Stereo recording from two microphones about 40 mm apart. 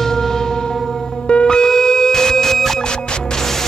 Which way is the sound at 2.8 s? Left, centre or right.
Left.